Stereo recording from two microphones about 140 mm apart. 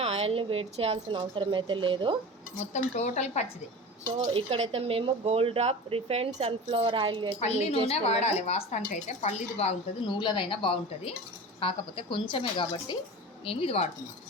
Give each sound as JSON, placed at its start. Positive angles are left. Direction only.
{"t": 0.0, "sound": "a woman's voice", "side_deg": -50}
{"t": 2.6, "sound": "a woman's voice", "side_deg": 55}
{"t": 4.4, "sound": "speech", "side_deg": -45}
{"t": 7.3, "sound": "a woman's voice", "side_deg": 50}
{"t": 10.1, "sound": "a woman's voice", "side_deg": 35}